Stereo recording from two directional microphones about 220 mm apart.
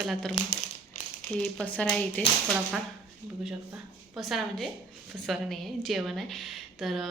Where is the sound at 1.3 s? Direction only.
Centre (ahead or behind).